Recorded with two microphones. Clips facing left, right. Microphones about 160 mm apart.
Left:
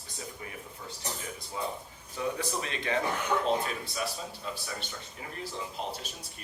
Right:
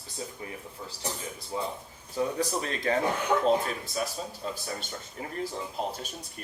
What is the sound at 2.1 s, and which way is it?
Speech, 40° right (ahead or behind).